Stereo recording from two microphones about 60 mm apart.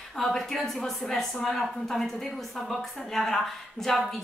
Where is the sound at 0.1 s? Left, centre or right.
Centre.